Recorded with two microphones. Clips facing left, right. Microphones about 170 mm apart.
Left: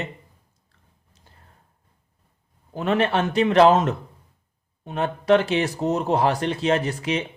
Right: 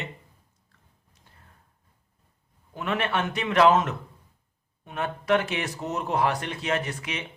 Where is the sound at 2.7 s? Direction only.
35° left (ahead or behind).